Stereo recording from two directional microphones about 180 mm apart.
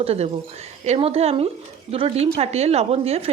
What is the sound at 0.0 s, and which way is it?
A woman's voice, 35° right (ahead or behind).